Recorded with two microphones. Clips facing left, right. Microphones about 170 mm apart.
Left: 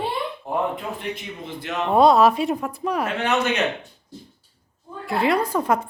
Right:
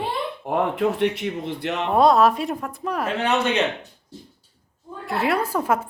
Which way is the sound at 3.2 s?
30° right (ahead or behind).